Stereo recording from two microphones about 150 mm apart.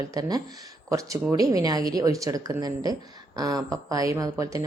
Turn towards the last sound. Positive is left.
turn(degrees=-20)  # may be behind; listen again after turning